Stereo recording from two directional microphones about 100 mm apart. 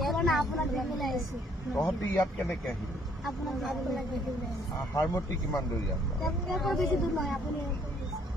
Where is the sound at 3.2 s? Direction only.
Centre (ahead or behind).